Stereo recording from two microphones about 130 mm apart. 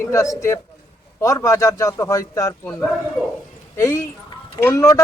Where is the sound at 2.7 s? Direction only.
10° left (ahead or behind).